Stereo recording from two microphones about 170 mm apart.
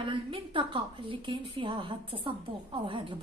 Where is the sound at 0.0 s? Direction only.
30° right (ahead or behind).